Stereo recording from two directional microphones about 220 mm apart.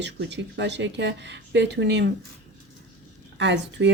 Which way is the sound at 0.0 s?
50° right (ahead or behind).